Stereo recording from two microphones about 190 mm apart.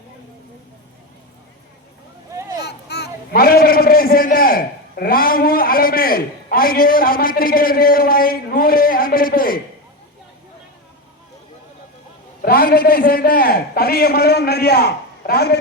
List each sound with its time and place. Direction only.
2.6 s a man's voice: 60° left (ahead or behind)
12.4 s a man's voice: 50° left (ahead or behind)